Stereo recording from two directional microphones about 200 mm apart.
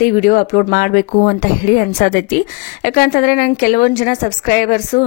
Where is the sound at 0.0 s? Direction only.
40° left (ahead or behind).